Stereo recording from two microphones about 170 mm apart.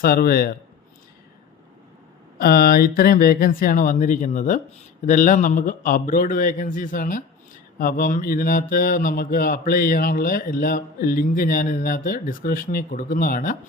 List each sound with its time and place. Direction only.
0.0 s speech: 60° left (ahead or behind)
2.4 s a man's voice: 60° left (ahead or behind)